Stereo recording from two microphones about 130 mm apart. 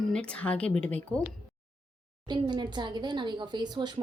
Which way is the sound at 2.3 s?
35° right (ahead or behind).